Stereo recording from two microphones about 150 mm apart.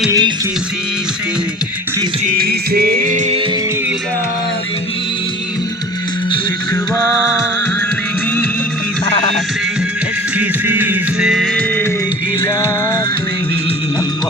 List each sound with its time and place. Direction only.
0.1 s music: 30° right (ahead or behind)
2.2 s music: 80° right; by 3.3 s 55° right (ahead or behind)
10.3 s music: 10° right (ahead or behind)